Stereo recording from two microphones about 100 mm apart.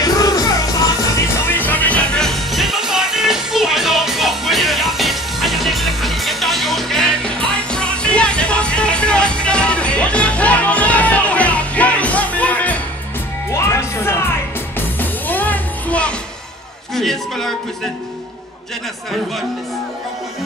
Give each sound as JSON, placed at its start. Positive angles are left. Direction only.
{"t": 0.0, "sound": "music", "side_deg": 40}
{"t": 1.4, "sound": "music", "side_deg": 20}
{"t": 13.5, "sound": "music", "side_deg": 30}
{"t": 16.9, "sound": "a sound", "side_deg": 5}